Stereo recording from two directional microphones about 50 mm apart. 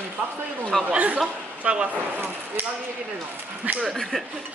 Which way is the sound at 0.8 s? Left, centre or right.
Right.